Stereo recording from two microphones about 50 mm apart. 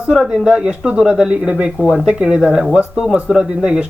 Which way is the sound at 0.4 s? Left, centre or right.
Centre.